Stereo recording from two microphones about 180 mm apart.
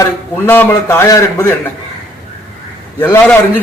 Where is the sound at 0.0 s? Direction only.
10° left (ahead or behind).